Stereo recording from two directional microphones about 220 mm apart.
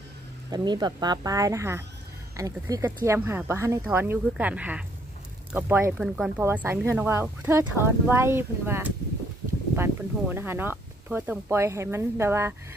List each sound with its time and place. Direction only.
0.5 s speech: 20° right (ahead or behind)